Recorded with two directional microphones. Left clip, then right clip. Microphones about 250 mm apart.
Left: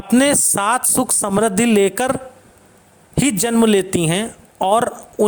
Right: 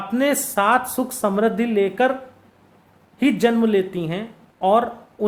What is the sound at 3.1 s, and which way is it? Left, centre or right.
Speech, left.